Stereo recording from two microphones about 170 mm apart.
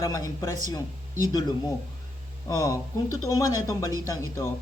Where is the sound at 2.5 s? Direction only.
20° left (ahead or behind).